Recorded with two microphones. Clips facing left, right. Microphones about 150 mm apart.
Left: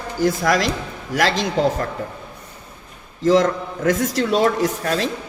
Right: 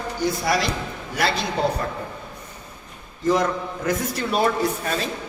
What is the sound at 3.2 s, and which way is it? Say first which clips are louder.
A man's voice: left 5 dB; 90° left.